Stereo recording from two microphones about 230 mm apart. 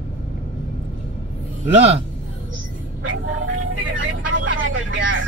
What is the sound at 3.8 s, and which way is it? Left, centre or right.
Vehicle, right.